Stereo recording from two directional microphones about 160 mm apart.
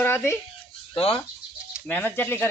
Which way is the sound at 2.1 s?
15° left (ahead or behind).